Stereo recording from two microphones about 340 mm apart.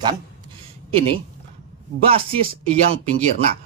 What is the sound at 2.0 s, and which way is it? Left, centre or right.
Speech, centre.